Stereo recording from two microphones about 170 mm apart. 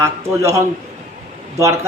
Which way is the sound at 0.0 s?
15° right (ahead or behind).